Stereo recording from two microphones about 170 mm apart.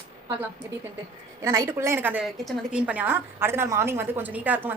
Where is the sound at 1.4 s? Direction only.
15° right (ahead or behind).